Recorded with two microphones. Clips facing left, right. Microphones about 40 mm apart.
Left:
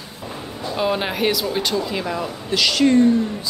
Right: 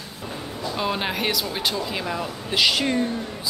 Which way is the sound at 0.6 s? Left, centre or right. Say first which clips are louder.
Left 4 dB; centre.